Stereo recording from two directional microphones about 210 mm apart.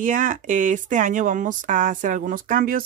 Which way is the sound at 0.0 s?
40° right (ahead or behind).